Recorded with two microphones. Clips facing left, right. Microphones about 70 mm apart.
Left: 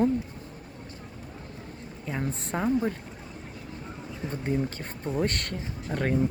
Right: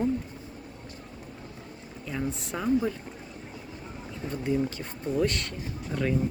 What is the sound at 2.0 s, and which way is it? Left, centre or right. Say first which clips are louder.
Speech: even; left.